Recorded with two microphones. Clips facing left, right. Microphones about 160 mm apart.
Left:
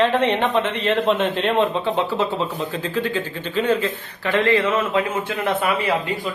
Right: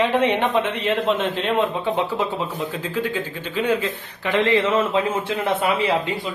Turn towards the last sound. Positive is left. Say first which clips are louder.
# even
turn(degrees=-25)  # may be behind; listen again after turning